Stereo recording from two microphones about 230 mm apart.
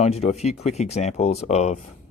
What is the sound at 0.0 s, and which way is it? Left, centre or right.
Speech, left.